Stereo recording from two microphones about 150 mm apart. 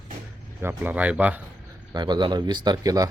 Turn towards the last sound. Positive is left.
turn(degrees=-25)  # may be behind; listen again after turning